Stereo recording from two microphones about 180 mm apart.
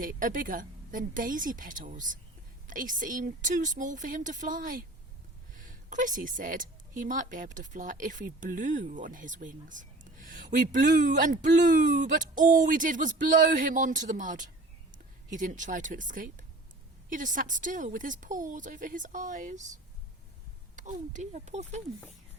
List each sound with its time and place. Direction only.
0.0 s a woman's voice: 50° right (ahead or behind)
20.7 s speech: 45° right (ahead or behind)